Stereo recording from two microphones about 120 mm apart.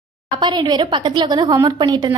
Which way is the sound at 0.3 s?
40° right (ahead or behind).